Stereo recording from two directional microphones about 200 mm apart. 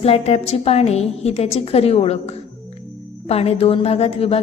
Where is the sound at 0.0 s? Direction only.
30° left (ahead or behind).